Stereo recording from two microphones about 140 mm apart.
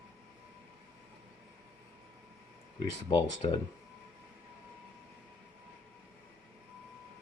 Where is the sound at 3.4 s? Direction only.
45° left (ahead or behind).